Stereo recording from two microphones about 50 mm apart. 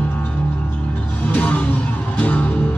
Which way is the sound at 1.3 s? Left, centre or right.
Left.